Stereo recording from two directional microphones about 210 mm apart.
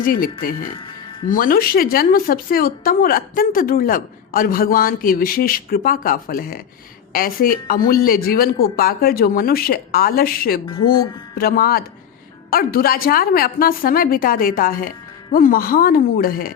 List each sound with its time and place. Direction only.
0.0 s a woman's voice: 40° left (ahead or behind)